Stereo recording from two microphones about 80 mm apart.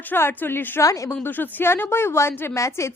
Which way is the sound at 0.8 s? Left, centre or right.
Left.